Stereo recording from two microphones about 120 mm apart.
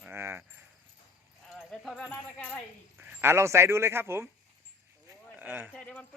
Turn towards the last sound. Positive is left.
turn(degrees=10)  # may be behind; listen again after turning